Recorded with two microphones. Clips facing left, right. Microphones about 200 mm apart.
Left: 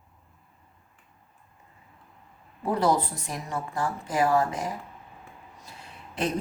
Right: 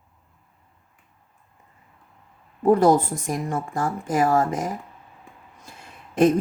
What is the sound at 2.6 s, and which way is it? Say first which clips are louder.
Speech: right 8 dB; 50° right (ahead or behind).